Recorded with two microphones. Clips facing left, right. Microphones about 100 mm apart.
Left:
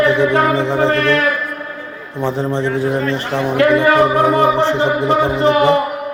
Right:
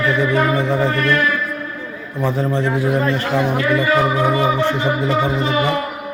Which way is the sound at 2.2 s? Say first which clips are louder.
Left 1 dB; 25° left (ahead or behind).